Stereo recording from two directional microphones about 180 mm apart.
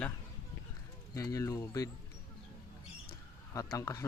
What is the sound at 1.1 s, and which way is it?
Speech, 20° left (ahead or behind).